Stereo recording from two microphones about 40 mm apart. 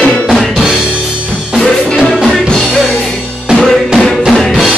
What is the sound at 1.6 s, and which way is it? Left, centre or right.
Music, centre.